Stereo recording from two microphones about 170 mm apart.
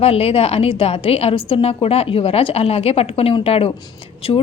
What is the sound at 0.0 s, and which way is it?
Speech, 35° left (ahead or behind).